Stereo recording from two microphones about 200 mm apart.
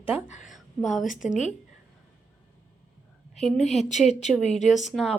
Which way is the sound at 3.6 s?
35° left (ahead or behind).